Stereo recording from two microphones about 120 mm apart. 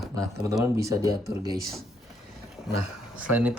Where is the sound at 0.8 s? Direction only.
25° right (ahead or behind).